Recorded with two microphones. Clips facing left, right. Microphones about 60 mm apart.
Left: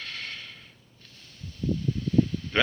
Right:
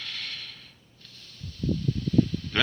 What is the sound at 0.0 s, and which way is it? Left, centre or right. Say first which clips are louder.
Mechanisms: left 1 dB; left.